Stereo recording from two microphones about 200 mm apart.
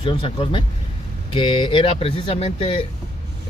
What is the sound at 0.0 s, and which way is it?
Speech, 25° left (ahead or behind).